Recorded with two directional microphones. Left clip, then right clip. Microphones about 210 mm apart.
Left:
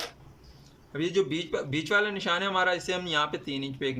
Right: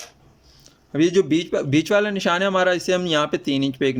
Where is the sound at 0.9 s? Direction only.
40° right (ahead or behind).